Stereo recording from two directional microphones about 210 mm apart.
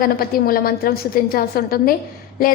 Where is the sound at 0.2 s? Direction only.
45° left (ahead or behind).